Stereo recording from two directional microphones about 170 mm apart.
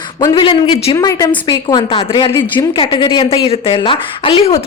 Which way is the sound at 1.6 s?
30° left (ahead or behind).